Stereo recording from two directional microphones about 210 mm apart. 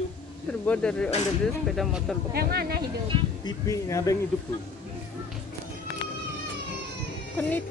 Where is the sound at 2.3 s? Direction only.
45° right (ahead or behind).